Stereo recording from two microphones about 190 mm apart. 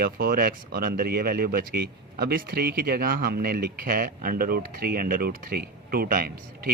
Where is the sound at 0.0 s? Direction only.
50° right (ahead or behind).